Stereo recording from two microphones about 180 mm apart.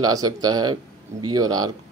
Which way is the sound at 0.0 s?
20° right (ahead or behind).